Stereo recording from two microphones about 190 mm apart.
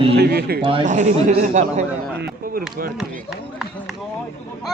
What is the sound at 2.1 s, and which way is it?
Speech, 55° right (ahead or behind).